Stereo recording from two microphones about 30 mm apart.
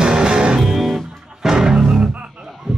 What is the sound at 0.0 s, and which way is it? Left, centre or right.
Music, right.